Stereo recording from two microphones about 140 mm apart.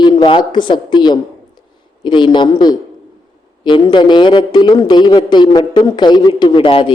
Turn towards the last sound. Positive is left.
turn(degrees=35)  # may be behind; listen again after turning